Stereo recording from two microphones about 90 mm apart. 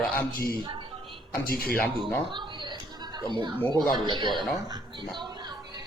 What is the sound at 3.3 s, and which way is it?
Speech, 60° right (ahead or behind).